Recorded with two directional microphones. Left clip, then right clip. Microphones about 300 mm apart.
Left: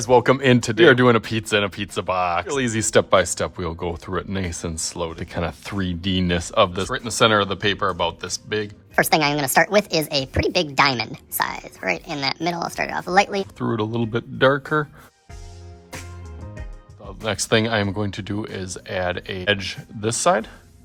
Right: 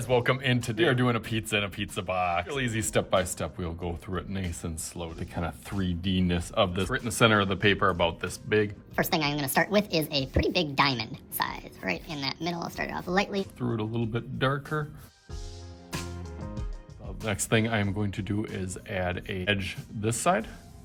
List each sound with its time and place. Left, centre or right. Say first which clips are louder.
0.0 s speech: left 10 dB; centre
17.2 s speech: left 7 dB; centre